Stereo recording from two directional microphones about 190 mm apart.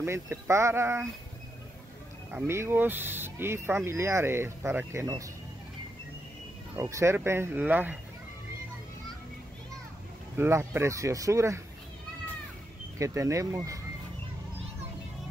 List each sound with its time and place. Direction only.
0.0 s speech: 15° right (ahead or behind)
2.3 s speech: 10° right (ahead or behind)
6.8 s speech: 15° right (ahead or behind)
10.3 s speech: 15° right (ahead or behind)
13.0 s speech: 15° right (ahead or behind)